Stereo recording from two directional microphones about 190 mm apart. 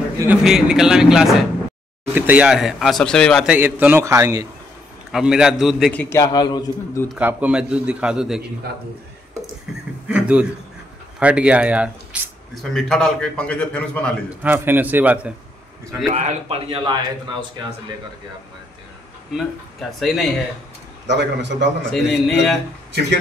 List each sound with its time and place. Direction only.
0.3 s a man's voice: centre (ahead or behind)
3.5 s a man's voice: 10° right (ahead or behind)
5.1 s a man's voice: 5° right (ahead or behind); by 7.1 s 20° left (ahead or behind)
7.1 s a man's voice: 5° right (ahead or behind)
10.0 s a man's voice: 5° right (ahead or behind)
14.4 s a man's voice: 10° right (ahead or behind)
16.1 s a man's voice: 40° right (ahead or behind)
19.3 s a man's voice: centre (ahead or behind)
21.1 s a man's voice: 65° right (ahead or behind)
21.9 s a man's voice: centre (ahead or behind)